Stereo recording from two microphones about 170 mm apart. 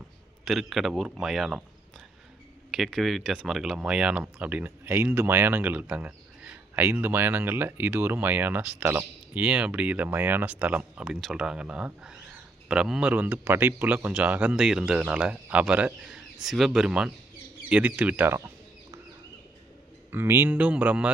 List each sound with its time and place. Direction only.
0.4 s speech: centre (ahead or behind)
2.7 s speech: centre (ahead or behind); by 18.9 s 15° right (ahead or behind)
20.1 s speech: 10° right (ahead or behind)